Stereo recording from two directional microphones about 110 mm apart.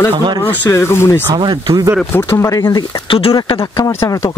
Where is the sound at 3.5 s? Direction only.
30° left (ahead or behind).